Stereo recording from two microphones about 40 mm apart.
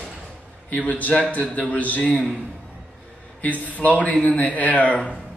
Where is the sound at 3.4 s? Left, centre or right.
Left.